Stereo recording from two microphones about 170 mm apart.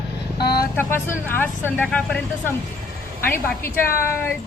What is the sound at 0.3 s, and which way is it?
Vehicle, 70° left (ahead or behind).